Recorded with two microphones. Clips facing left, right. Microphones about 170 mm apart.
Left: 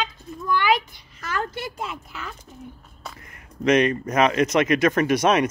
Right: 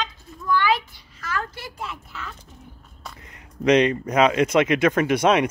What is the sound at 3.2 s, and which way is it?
Speech, 20° right (ahead or behind).